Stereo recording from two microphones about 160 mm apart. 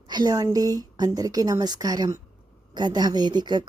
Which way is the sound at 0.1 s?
25° right (ahead or behind).